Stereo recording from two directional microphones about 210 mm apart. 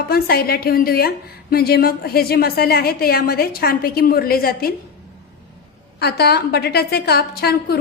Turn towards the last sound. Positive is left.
turn(degrees=50)  # may be behind; listen again after turning